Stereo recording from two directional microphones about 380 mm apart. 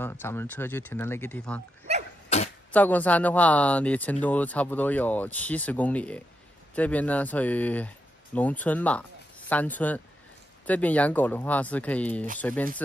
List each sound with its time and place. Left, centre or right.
0.0 s speech: centre
2.2 s a sound: centre
2.7 s speech: centre